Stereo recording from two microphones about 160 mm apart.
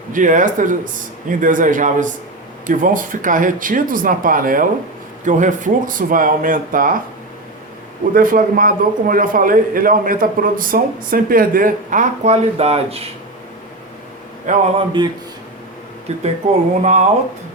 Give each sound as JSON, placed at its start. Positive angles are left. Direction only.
{"t": 0.1, "sound": "a man's voice", "side_deg": -55}
{"t": 8.1, "sound": "a man's voice", "side_deg": -60}
{"t": 14.5, "sound": "speech", "side_deg": -55}
{"t": 15.0, "sound": "speech", "side_deg": -30}
{"t": 16.1, "sound": "speech", "side_deg": -40}